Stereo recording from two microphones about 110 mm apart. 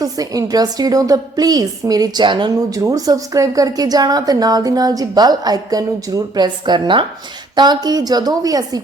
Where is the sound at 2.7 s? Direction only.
30° right (ahead or behind).